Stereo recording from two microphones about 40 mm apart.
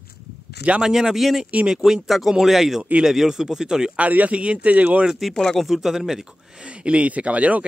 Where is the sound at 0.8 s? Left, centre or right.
Centre.